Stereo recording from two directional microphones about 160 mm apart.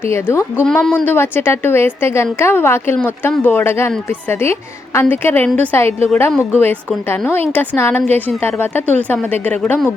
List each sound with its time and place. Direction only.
0.0 s a woman's voice: 15° left (ahead or behind)
0.6 s a woman's voice: 5° left (ahead or behind)